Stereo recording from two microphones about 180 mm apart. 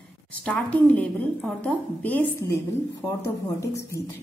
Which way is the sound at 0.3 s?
5° left (ahead or behind).